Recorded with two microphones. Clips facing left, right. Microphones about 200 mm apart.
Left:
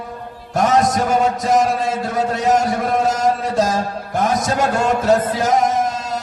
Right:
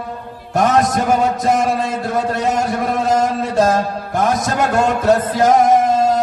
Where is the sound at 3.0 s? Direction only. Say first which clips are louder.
Right 1 dB; 60° right (ahead or behind).